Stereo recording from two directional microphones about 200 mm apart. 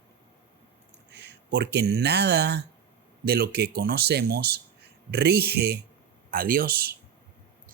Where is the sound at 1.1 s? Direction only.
55° right (ahead or behind).